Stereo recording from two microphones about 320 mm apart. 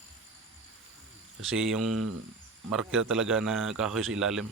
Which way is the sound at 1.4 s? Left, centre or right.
Centre.